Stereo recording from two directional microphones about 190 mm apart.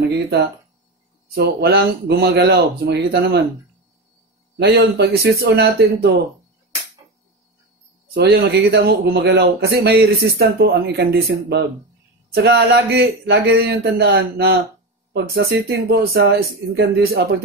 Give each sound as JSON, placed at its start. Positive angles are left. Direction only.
{"t": 1.3, "sound": "speech", "side_deg": -60}
{"t": 4.6, "sound": "speech", "side_deg": -60}
{"t": 8.1, "sound": "speech", "side_deg": -55}